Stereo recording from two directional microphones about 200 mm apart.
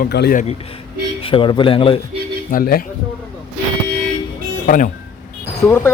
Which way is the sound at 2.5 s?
45° left (ahead or behind).